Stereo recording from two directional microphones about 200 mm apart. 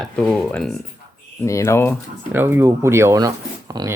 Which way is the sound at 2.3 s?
10° right (ahead or behind).